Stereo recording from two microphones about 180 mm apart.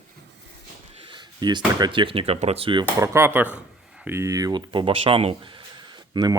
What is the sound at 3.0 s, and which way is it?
Speech, 15° right (ahead or behind).